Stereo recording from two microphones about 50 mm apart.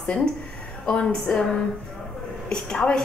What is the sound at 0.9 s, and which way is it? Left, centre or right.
Speech, centre.